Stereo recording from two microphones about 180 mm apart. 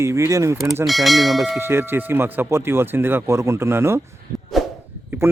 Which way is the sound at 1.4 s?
10° right (ahead or behind).